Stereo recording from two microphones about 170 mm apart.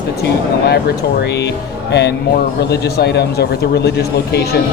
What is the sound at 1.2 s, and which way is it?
A man's voice, 80° left.